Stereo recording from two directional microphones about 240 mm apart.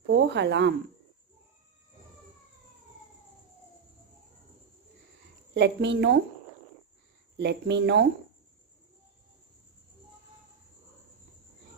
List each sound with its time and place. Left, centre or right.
0.0 s speech: right
5.5 s a woman's voice: right
7.3 s a woman's voice: right